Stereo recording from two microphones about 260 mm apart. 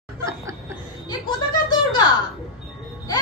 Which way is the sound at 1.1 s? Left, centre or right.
Centre.